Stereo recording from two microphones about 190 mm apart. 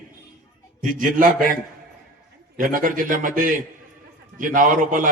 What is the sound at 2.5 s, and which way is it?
A man's voice, 45° right (ahead or behind).